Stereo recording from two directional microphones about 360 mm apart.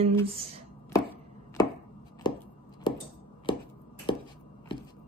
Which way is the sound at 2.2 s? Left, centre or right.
Centre.